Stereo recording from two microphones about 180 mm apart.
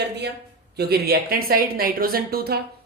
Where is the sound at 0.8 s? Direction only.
60° right (ahead or behind).